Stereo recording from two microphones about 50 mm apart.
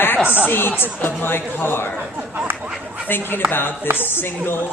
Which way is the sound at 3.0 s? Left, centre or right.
Left.